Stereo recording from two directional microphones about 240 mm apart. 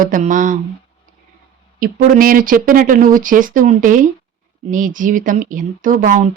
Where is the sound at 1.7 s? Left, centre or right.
Right.